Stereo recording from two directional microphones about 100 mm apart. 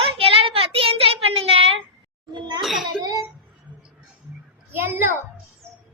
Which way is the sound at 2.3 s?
50° right (ahead or behind).